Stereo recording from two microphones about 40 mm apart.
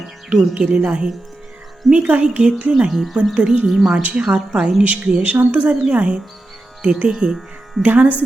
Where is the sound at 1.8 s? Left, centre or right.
Centre.